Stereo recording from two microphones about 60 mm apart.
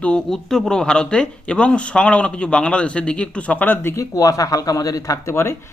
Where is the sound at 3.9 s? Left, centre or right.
Left.